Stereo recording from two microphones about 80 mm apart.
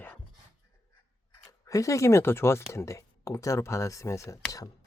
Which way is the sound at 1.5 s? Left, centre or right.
Left.